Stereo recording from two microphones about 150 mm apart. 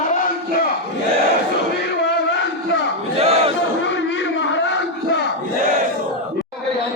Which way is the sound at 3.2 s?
45° right (ahead or behind).